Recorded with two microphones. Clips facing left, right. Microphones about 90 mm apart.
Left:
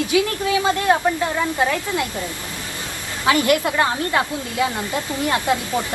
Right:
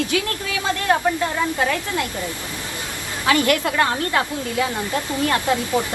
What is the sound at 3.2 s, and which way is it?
Speech, 20° left (ahead or behind).